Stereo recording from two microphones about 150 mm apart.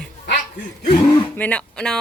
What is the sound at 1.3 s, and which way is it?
Speech, 10° left (ahead or behind).